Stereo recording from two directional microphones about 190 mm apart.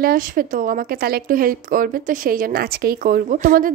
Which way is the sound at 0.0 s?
50° right (ahead or behind).